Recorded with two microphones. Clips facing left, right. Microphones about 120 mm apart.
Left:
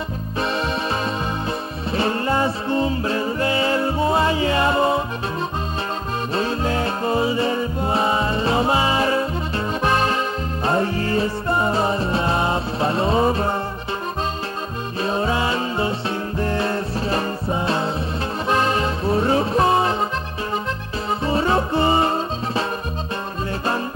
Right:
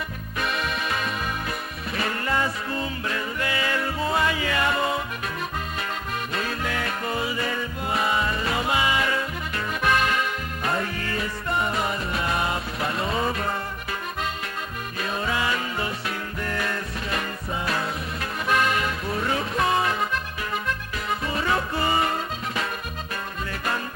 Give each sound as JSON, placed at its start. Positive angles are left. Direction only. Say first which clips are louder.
{"t": 0.4, "sound": "music", "louder": "left 5 dB", "side_deg": 30}
{"t": 6.3, "sound": "music", "louder": "left 8 dB", "side_deg": 30}
{"t": 15.0, "sound": "music", "louder": "left 6 dB", "side_deg": 30}
{"t": 21.2, "sound": "music", "louder": "left 7 dB", "side_deg": 30}